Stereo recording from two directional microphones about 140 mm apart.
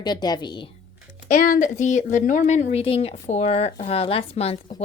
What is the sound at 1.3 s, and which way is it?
Speech, 85° left.